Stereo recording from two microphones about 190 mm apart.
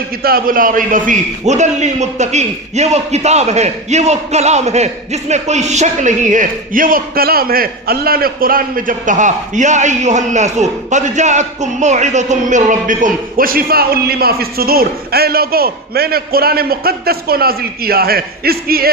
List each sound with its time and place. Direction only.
0.2 s a man's voice: 50° right (ahead or behind)